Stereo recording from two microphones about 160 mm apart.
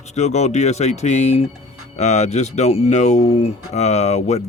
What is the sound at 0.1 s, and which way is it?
Speech, 45° left (ahead or behind).